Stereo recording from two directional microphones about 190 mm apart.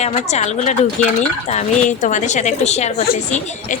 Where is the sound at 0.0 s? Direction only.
35° left (ahead or behind).